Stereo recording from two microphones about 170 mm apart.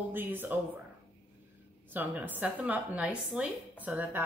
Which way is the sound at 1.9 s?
10° right (ahead or behind).